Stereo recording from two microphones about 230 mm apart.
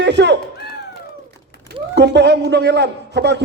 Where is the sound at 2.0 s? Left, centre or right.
Right.